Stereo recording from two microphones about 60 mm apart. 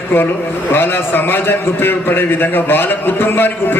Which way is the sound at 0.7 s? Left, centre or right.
Left.